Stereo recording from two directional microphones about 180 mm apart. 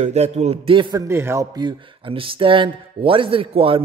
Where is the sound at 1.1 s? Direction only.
15° right (ahead or behind).